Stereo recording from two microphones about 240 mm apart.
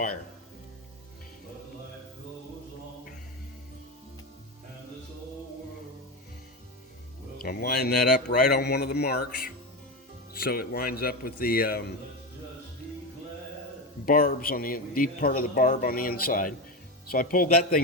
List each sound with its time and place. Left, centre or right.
7.4 s speech: left
14.0 s speech: left